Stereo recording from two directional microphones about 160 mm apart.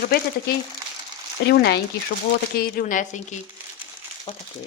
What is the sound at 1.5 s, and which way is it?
Speech, 90° left.